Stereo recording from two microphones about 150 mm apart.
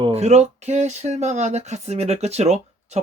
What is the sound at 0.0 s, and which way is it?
Speech, 45° right (ahead or behind).